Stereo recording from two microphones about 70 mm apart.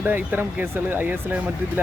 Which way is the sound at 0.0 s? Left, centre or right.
Right.